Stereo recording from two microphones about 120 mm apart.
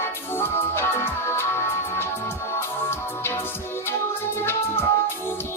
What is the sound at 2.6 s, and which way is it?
Music, 20° left (ahead or behind).